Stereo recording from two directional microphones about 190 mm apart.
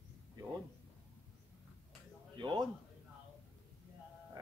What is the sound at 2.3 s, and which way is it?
Speech, 25° right (ahead or behind).